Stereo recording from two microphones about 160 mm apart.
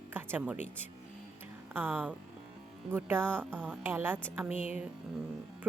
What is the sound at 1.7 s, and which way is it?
Speech, 10° right (ahead or behind).